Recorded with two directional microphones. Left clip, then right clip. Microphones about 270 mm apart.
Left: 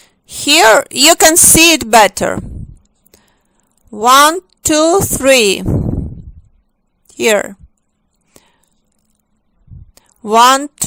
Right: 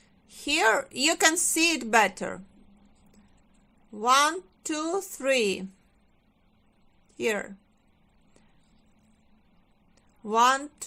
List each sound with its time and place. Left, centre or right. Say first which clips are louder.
0.0 s a woman's voice: left 18 dB; left
3.1 s a sound: left 16 dB; left
3.9 s speech: left 15 dB; left
7.1 s speech: left 17 dB; left
8.4 s whispering: left 17 dB; left
9.9 s a woman's voice: left 15 dB; left